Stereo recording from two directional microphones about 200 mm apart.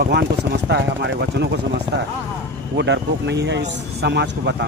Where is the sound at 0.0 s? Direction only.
55° right (ahead or behind).